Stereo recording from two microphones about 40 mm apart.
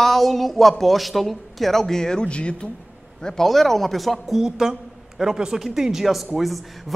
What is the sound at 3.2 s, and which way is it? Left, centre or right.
Speech, centre.